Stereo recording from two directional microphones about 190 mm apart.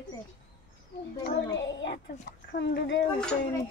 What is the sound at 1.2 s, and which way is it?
A child's voice, 70° left (ahead or behind).